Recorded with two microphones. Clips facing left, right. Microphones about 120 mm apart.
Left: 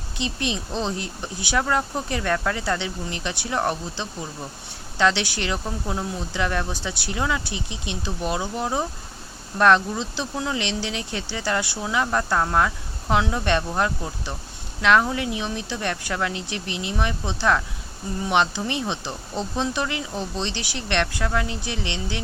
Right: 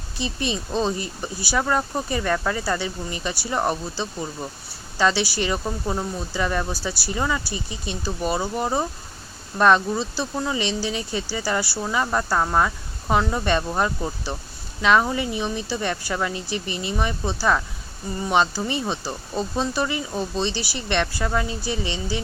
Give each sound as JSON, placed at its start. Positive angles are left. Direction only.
{"t": 0.2, "sound": "speech", "side_deg": 65}
{"t": 0.7, "sound": "speech", "side_deg": -10}
{"t": 7.5, "sound": "speech", "side_deg": 70}
{"t": 8.0, "sound": "speech", "side_deg": -5}
{"t": 16.6, "sound": "speech", "side_deg": 70}
{"t": 17.3, "sound": "speech", "side_deg": -5}
{"t": 21.7, "sound": "speech", "side_deg": 70}